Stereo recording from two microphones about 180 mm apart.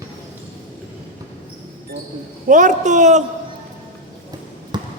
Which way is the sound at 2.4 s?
45° right (ahead or behind).